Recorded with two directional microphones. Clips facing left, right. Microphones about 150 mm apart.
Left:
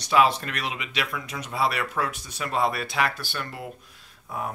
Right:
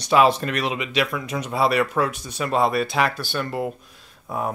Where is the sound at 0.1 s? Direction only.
30° right (ahead or behind).